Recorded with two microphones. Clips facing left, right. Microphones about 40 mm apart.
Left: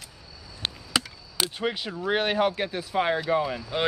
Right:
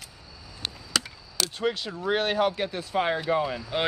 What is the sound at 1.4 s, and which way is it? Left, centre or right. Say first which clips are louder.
Speech: even; left.